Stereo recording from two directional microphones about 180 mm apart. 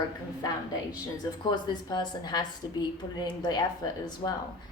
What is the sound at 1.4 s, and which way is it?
Speech, 25° left (ahead or behind).